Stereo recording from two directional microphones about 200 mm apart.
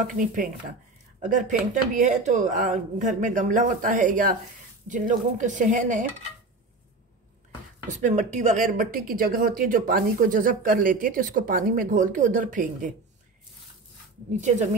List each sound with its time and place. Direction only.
0.0 s speech: 40° right (ahead or behind)
7.9 s speech: 35° right (ahead or behind)
14.4 s speech: 35° right (ahead or behind)